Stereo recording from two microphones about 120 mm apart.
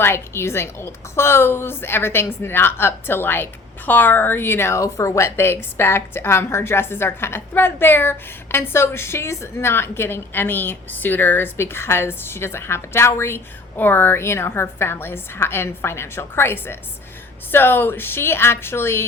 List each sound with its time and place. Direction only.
0.0 s a woman's voice: 20° left (ahead or behind)